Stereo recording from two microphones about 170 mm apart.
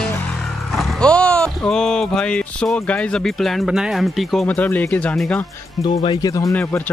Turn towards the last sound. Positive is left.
turn(degrees=10)  # may be behind; listen again after turning